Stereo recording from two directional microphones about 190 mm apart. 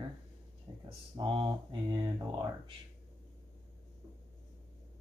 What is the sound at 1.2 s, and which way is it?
Speech, 25° right (ahead or behind).